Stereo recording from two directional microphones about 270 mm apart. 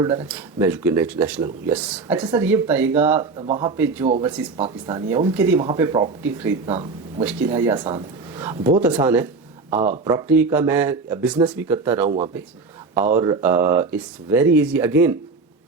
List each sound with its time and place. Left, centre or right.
0.0 s speech: centre
3.4 s speech: right
3.8 s speech: centre
4.0 s speech: right
7.3 s speech: centre
13.1 s speech: centre